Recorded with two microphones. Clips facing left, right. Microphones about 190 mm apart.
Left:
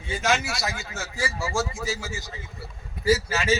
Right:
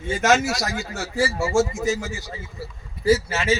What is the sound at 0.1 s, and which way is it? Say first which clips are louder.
A man's voice: right 6 dB; 45° right (ahead or behind).